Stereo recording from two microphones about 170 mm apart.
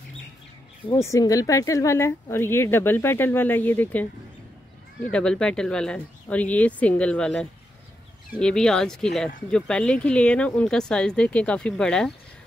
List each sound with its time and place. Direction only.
0.8 s speech: 20° left (ahead or behind)
5.1 s speech: 5° left (ahead or behind)